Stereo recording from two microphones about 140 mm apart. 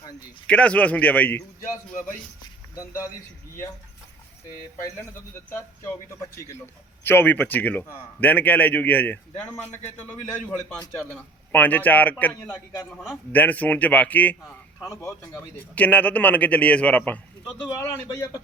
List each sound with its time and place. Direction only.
0.4 s a man's voice: 10° left (ahead or behind)
2.7 s speech: 20° left (ahead or behind)
5.5 s a man's voice: 20° left (ahead or behind)
17.7 s speech: 25° left (ahead or behind)